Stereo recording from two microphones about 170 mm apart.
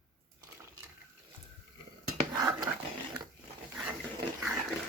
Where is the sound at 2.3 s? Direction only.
20° right (ahead or behind).